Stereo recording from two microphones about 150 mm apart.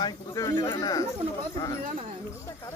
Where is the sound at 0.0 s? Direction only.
25° left (ahead or behind).